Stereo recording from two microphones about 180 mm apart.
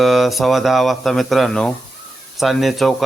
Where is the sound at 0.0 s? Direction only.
Centre (ahead or behind).